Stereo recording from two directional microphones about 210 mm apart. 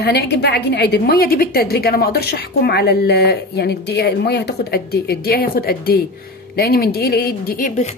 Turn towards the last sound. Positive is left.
turn(degrees=35)  # may be behind; listen again after turning